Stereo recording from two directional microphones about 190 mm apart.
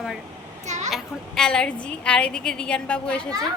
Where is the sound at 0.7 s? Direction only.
35° right (ahead or behind).